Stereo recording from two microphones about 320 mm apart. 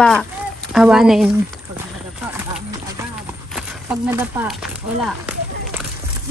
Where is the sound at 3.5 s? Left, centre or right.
Centre.